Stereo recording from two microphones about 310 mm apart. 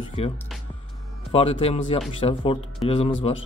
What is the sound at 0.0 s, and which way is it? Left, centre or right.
Music, centre.